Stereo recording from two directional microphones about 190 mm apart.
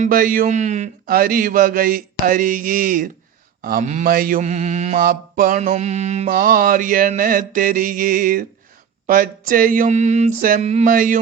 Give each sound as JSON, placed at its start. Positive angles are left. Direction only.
{"t": 0.0, "sound": "mantra", "side_deg": -50}